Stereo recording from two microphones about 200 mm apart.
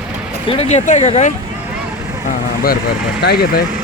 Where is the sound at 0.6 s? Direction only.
35° left (ahead or behind).